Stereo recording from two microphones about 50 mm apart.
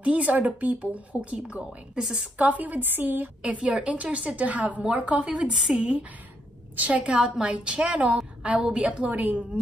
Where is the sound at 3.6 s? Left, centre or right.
Centre.